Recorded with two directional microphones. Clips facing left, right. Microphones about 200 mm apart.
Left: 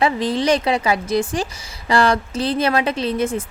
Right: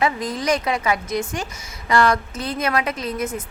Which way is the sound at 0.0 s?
30° left (ahead or behind).